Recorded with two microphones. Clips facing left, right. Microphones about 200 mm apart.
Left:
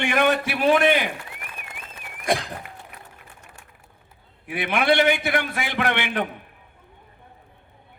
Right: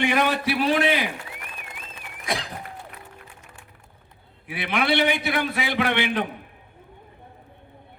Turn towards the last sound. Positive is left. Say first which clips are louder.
# right 1 dB
turn(degrees=55)  # may be behind; listen again after turning